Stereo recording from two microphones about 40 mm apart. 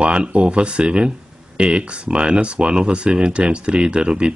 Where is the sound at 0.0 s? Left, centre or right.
Right.